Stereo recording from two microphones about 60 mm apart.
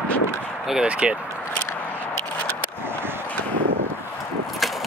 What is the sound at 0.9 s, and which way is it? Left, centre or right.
Speech, centre.